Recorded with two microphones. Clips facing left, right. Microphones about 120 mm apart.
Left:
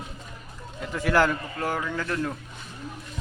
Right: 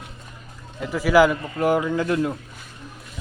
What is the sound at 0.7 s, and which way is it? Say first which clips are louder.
Speech: right 6 dB; 5° right (ahead or behind).